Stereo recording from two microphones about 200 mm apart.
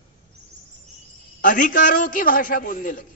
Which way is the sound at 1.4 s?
45° left (ahead or behind).